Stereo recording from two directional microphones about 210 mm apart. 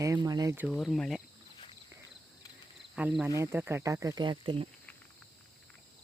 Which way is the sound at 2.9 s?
5° right (ahead or behind).